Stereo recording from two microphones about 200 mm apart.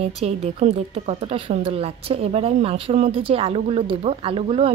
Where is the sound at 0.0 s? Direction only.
30° right (ahead or behind).